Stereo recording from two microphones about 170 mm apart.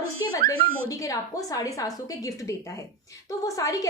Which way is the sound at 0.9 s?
20° left (ahead or behind).